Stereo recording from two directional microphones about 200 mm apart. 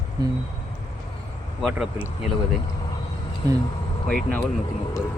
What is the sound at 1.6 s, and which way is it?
Speech, centre (ahead or behind).